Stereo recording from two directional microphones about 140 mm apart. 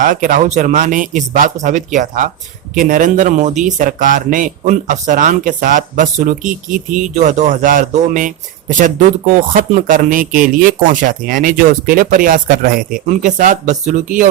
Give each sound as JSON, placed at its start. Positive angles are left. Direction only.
{"t": 0.0, "sound": "speech", "side_deg": -75}
{"t": 13.1, "sound": "speech", "side_deg": -60}